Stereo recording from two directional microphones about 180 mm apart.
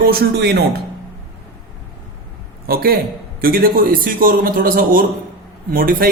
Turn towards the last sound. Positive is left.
turn(degrees=-50)  # may be behind; listen again after turning